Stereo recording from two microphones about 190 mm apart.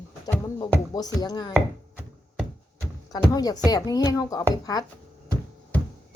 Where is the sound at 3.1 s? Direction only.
20° left (ahead or behind).